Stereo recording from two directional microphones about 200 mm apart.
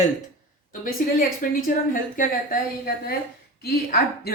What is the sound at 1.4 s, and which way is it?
Speech, 45° left (ahead or behind).